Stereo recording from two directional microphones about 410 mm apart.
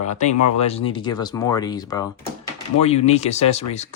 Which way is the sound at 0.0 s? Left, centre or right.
Centre.